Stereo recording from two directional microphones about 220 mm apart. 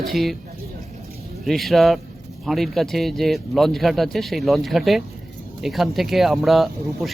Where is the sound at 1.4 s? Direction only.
Centre (ahead or behind).